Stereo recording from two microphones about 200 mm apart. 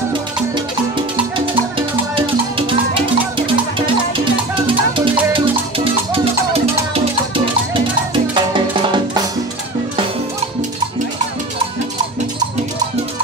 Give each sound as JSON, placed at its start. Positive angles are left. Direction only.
{"t": 1.4, "sound": "music", "side_deg": -25}
{"t": 6.1, "sound": "music", "side_deg": -30}
{"t": 8.1, "sound": "music", "side_deg": -25}